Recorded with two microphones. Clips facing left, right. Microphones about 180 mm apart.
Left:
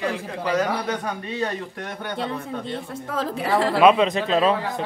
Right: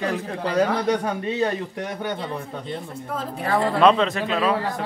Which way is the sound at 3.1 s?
90° left.